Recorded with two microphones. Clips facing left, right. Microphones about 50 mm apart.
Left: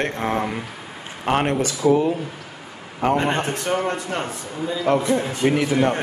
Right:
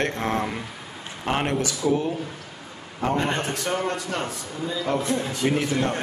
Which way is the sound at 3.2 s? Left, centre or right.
Centre.